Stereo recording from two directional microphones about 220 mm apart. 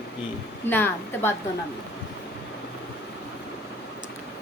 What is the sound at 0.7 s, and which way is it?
Speech, 10° left (ahead or behind).